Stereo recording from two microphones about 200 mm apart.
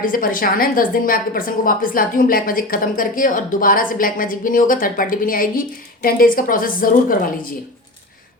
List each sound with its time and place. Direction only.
0.0 s a woman's voice: 45° left (ahead or behind)